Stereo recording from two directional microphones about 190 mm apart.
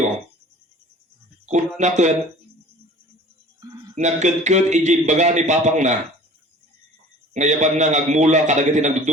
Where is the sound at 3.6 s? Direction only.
20° right (ahead or behind).